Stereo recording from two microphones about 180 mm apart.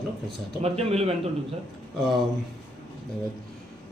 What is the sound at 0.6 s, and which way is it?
Speech, 35° right (ahead or behind).